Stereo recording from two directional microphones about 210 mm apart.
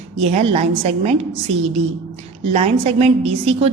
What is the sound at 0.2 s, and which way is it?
Speech, 30° right (ahead or behind).